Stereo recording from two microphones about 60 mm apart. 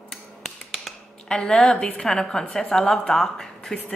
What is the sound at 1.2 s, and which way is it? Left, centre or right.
A woman's voice, centre.